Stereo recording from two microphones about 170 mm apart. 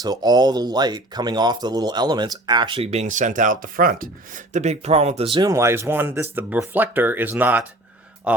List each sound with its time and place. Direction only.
0.0 s speech: 25° right (ahead or behind)
5.4 s speech: 20° right (ahead or behind)